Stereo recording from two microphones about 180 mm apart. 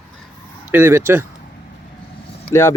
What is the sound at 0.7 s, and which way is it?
Speech, 15° right (ahead or behind).